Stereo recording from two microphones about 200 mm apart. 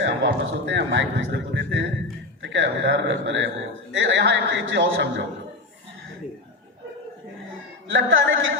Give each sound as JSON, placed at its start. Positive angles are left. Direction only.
{"t": 0.0, "sound": "speech", "side_deg": -65}
{"t": 7.9, "sound": "a woman's voice", "side_deg": -75}